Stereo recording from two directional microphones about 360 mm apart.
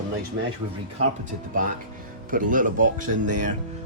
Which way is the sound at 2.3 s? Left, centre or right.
Right.